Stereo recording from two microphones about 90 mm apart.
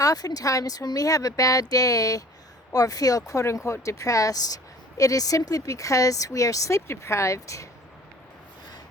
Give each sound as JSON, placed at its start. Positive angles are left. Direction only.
{"t": 0.0, "sound": "speech", "side_deg": 40}